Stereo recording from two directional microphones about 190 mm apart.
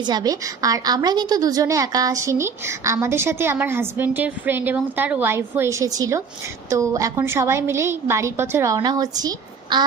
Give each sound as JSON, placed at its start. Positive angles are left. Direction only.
{"t": 0.0, "sound": "a woman's voice", "side_deg": -20}